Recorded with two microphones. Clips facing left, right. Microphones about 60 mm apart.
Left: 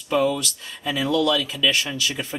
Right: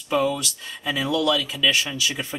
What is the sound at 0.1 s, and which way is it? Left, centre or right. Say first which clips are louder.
Speech: left 1 dB; centre.